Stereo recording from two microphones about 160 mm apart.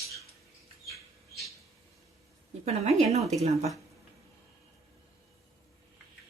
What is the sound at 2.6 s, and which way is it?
Speech, 40° right (ahead or behind).